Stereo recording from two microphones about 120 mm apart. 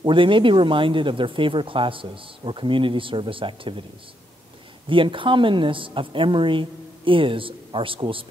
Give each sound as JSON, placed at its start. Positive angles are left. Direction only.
{"t": 0.0, "sound": "speech", "side_deg": -45}
{"t": 4.8, "sound": "speech", "side_deg": -45}